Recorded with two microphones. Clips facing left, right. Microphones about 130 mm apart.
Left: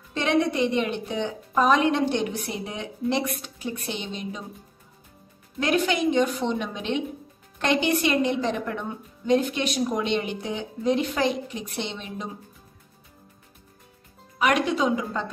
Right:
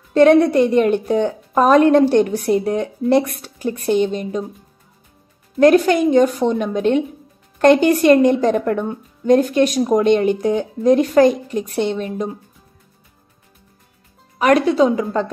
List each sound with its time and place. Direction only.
0.1 s a woman's voice: 45° right (ahead or behind)
5.6 s a woman's voice: 45° right (ahead or behind)
14.4 s a woman's voice: 40° right (ahead or behind)